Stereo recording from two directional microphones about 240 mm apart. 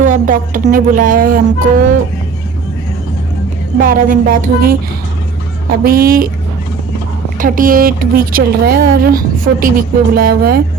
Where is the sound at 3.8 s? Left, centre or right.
Right.